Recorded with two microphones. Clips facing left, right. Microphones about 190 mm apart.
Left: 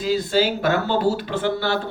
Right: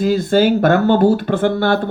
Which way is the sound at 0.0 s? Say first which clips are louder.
Right 6 dB; 50° right (ahead or behind).